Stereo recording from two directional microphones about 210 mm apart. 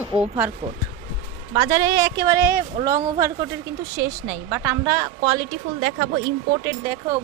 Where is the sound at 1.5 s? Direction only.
15° right (ahead or behind); by 6.0 s 30° right (ahead or behind).